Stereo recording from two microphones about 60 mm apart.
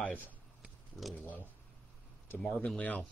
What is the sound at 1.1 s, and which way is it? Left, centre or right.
Speech, left.